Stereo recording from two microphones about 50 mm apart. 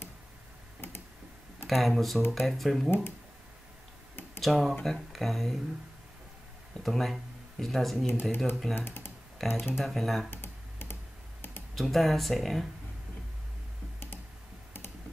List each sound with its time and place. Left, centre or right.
1.7 s speech: centre
4.4 s speech: centre
6.8 s speech: centre
8.1 s speech: left
9.4 s speech: centre
10.3 s computer keyboard: left
11.7 s speech: centre